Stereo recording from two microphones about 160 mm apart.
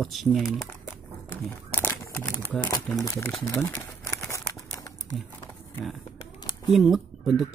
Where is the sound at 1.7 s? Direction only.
15° left (ahead or behind).